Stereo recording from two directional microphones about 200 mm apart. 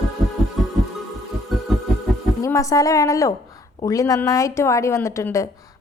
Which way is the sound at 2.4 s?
15° left (ahead or behind).